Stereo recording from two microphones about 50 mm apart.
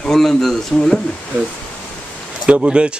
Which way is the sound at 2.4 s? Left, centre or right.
Right.